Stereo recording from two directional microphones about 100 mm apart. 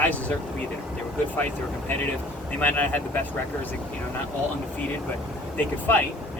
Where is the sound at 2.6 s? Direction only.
15° left (ahead or behind).